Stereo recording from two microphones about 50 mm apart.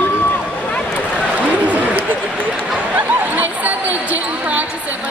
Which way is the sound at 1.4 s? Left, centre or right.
Right.